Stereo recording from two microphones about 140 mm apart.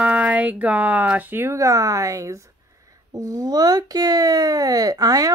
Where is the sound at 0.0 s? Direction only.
10° right (ahead or behind).